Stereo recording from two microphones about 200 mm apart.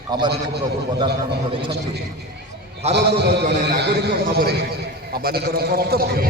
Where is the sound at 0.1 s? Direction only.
20° right (ahead or behind).